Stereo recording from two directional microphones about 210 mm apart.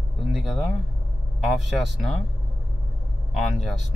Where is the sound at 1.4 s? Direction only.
Centre (ahead or behind).